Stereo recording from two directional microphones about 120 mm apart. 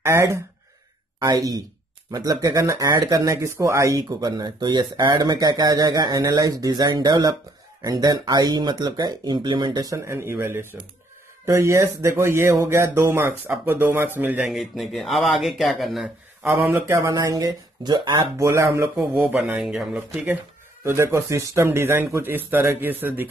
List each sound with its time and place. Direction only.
0.0 s a man's voice: 20° right (ahead or behind)
14.5 s speech: centre (ahead or behind)
16.4 s a man's voice: 15° right (ahead or behind); by 18.2 s 35° right (ahead or behind)
18.4 s a man's voice: 25° right (ahead or behind)
19.4 s speech: 5° right (ahead or behind)
20.8 s a man's voice: 20° right (ahead or behind)